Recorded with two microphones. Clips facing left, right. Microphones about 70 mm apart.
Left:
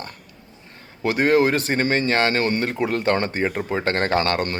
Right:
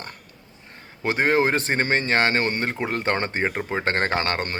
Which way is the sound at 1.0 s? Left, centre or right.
Right.